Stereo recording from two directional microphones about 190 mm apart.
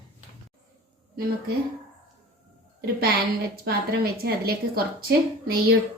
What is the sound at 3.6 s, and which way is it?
A woman's voice, 55° right (ahead or behind).